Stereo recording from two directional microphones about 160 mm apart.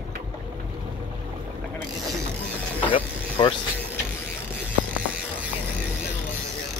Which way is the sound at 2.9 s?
35° left (ahead or behind).